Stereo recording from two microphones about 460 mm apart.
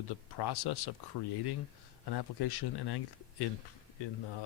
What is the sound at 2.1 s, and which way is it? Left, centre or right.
Speech, left.